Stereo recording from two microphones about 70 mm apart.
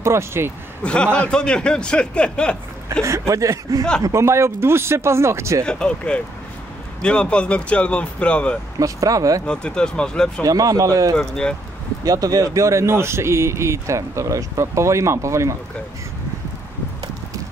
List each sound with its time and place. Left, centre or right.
0.0 s speech: right
0.8 s a man's voice: centre
3.0 s speech: right
4.1 s speech: right
5.7 s a man's voice: centre
8.7 s speech: right
9.5 s a man's voice: centre
10.4 s speech: right
11.1 s a man's voice: centre
12.0 s speech: right